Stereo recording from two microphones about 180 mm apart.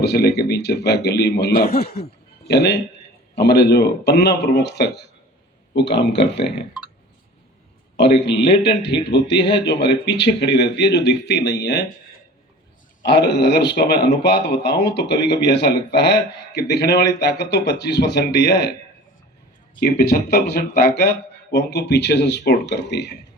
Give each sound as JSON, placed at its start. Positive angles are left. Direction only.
{"t": 0.0, "sound": "a man's voice", "side_deg": 65}
{"t": 7.9, "sound": "speech", "side_deg": 70}
{"t": 13.0, "sound": "a man's voice", "side_deg": 70}
{"t": 19.8, "sound": "speech", "side_deg": 60}